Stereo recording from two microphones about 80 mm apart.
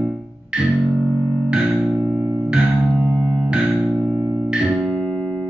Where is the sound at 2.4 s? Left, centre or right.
Centre.